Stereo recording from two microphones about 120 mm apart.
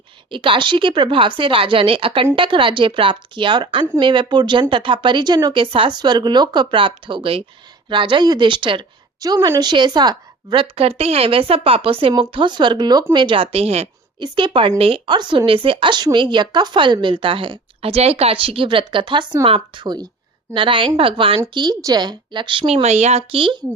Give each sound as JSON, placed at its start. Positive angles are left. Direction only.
{"t": 0.3, "sound": "a woman's voice", "side_deg": -45}
{"t": 14.2, "sound": "a woman's voice", "side_deg": -40}
{"t": 21.6, "sound": "speech", "side_deg": -30}
{"t": 22.6, "sound": "speech", "side_deg": -65}